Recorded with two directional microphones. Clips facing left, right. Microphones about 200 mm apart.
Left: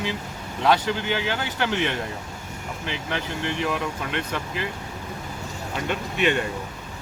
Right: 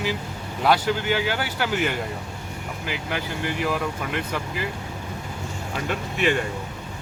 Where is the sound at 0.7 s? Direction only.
10° right (ahead or behind).